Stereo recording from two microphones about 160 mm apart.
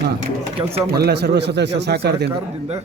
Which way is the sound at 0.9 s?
90° right.